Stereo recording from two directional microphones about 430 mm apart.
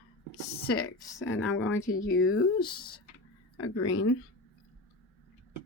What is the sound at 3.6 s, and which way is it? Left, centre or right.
Speech, left.